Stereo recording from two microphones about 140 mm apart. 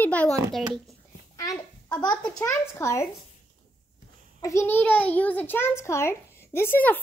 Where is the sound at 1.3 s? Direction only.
25° left (ahead or behind).